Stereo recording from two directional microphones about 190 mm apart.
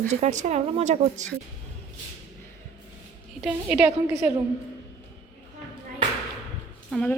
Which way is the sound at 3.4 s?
5° right (ahead or behind).